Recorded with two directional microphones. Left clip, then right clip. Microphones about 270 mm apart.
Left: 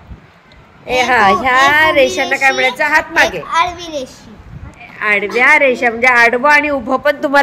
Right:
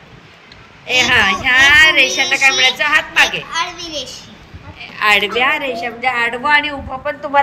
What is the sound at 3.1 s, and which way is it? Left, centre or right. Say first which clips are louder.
Speech: left 1 dB; left.